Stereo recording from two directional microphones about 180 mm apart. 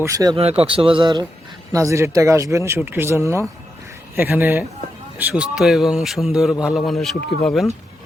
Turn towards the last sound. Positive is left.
turn(degrees=0)  # may be behind; listen again after turning